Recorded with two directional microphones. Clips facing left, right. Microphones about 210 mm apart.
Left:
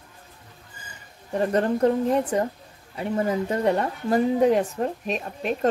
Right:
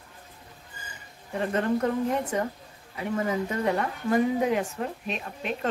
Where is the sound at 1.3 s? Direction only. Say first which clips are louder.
Left 4 dB; 35° left (ahead or behind).